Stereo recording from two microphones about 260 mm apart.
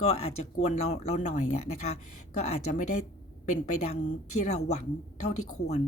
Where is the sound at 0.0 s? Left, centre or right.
Left.